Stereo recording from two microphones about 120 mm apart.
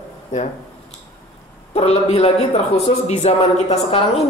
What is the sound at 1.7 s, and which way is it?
Speech, 60° left (ahead or behind).